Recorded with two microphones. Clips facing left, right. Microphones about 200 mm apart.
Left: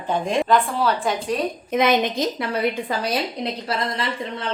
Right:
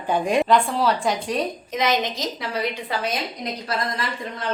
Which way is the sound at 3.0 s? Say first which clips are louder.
Left 3 dB; 30° left (ahead or behind).